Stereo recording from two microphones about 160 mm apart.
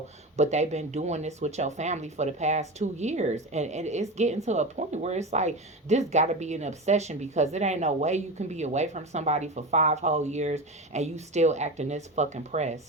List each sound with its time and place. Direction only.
0.3 s speech: 45° right (ahead or behind)